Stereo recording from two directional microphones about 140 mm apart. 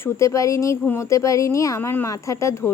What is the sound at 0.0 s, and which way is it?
A woman's voice, 20° left (ahead or behind).